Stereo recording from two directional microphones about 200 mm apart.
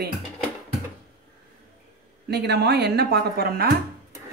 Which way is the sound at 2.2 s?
55° right (ahead or behind).